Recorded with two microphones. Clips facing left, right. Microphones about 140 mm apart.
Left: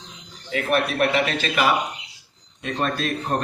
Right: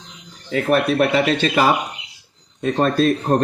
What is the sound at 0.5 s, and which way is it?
Speech, 35° right (ahead or behind).